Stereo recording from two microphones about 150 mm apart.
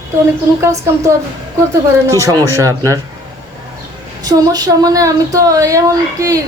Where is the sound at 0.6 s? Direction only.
20° right (ahead or behind).